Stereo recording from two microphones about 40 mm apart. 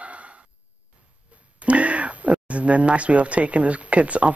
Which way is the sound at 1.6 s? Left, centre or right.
Right.